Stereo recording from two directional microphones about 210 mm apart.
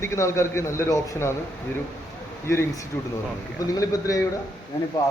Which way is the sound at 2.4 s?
10° left (ahead or behind).